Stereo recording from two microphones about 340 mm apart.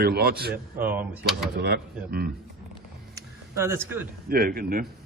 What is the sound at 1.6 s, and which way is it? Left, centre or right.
Speech, right.